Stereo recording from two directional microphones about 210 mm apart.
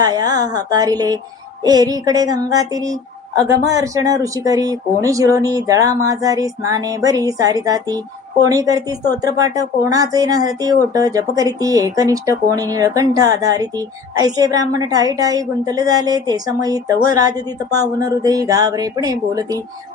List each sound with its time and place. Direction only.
0.0 s a woman's voice: 20° right (ahead or behind)